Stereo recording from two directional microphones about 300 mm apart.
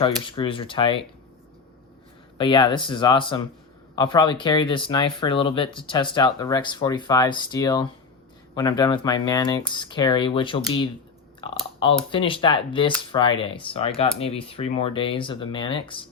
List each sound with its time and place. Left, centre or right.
0.0 s speech: centre
2.4 s speech: centre